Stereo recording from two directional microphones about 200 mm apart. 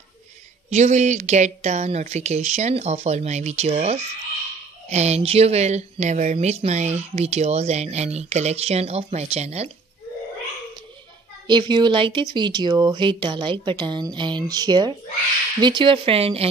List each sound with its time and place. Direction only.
0.7 s speech: 35° right (ahead or behind)
11.4 s speech: 25° right (ahead or behind)